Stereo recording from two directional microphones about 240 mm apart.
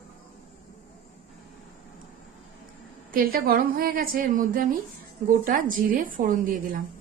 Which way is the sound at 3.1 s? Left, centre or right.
Right.